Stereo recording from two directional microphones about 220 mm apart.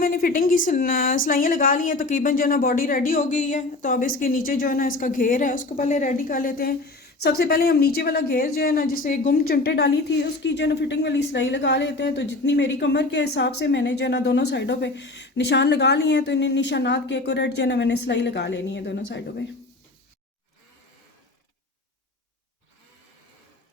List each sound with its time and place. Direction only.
0.0 s speech: 40° left (ahead or behind)